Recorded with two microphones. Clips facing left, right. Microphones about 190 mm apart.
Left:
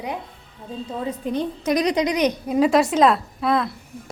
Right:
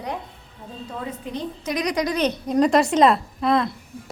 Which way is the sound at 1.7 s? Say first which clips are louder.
Left 3 dB; 30° left (ahead or behind).